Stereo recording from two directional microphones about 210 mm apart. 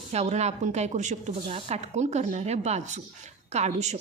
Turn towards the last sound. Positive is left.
turn(degrees=-30)  # may be behind; listen again after turning